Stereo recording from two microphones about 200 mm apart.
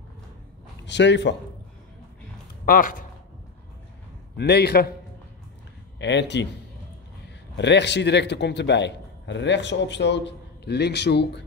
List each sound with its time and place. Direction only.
0.8 s a man's voice: 60° left (ahead or behind)
2.6 s speech: 45° left (ahead or behind)
4.4 s a man's voice: 55° left (ahead or behind)
5.9 s a man's voice: 60° left (ahead or behind)
7.5 s a man's voice: 60° left (ahead or behind)